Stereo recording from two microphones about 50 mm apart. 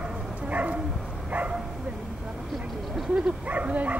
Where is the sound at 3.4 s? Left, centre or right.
Right.